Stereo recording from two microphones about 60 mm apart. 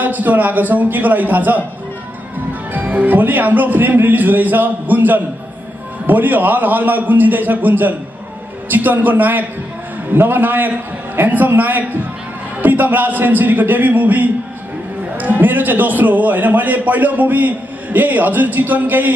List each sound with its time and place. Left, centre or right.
0.0 s a man's voice: right
2.7 s a man's voice: right